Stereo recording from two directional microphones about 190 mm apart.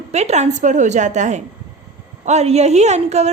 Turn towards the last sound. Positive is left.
turn(degrees=-35)  # may be behind; listen again after turning